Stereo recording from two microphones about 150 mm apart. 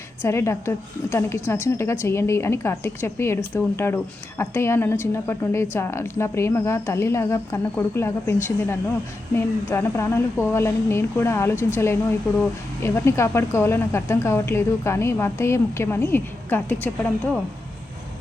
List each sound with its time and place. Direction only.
0.2 s a woman's voice: 15° left (ahead or behind)